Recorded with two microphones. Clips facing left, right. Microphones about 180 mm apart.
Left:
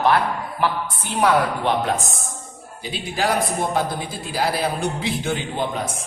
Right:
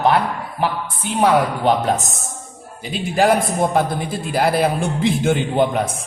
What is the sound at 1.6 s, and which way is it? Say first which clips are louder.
A man's voice: right 4 dB; 40° right (ahead or behind).